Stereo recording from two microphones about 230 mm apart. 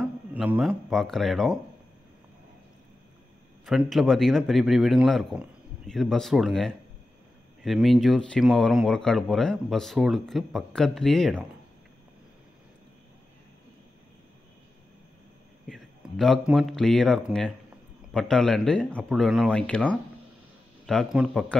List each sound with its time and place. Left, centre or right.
0.0 s speech: centre
3.6 s speech: centre
15.6 s speech: centre